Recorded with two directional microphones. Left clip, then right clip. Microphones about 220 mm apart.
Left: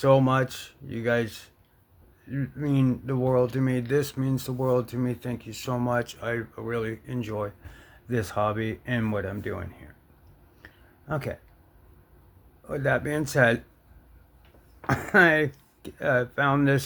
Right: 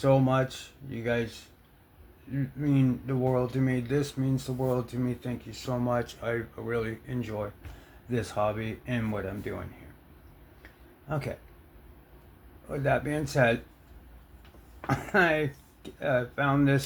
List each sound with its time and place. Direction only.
0.0 s speech: 50° left (ahead or behind)
8.1 s speech: 50° left (ahead or behind)
12.6 s speech: 45° left (ahead or behind)
14.8 s speech: 50° left (ahead or behind)